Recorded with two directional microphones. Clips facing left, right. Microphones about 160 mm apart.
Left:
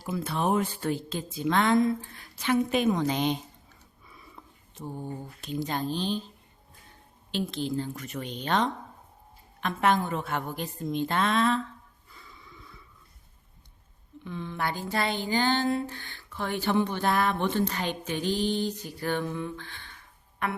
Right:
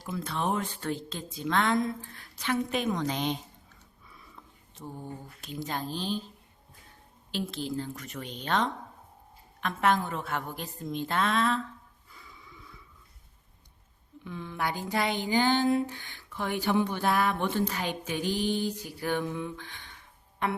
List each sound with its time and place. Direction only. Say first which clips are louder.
0.0 s speech: left 3 dB; 5° left (ahead or behind)
4.1 s a sound: left 2 dB; 5° left (ahead or behind)
4.9 s speech: left 4 dB; centre (ahead or behind)
7.3 s speech: left 3 dB; 5° right (ahead or behind)
12.1 s snort: left 1 dB; 10° right (ahead or behind)
14.3 s speech: left 1 dB; 5° right (ahead or behind)
20.4 s speech: right 1 dB; 25° right (ahead or behind)